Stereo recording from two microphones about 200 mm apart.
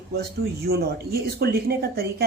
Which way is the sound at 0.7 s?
50° right (ahead or behind).